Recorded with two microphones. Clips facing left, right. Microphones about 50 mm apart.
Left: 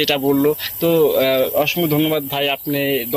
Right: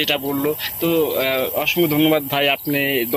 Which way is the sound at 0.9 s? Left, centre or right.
Right.